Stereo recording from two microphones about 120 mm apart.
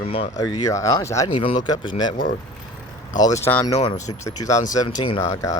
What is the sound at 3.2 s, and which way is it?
Speech, 30° left (ahead or behind).